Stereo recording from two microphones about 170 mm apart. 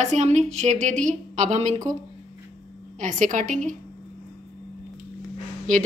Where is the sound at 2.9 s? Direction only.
50° right (ahead or behind).